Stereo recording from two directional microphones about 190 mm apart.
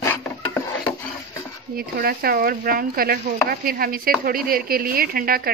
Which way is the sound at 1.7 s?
50° right (ahead or behind).